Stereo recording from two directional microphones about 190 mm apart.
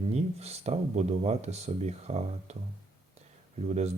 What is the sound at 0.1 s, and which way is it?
Speech, 35° right (ahead or behind).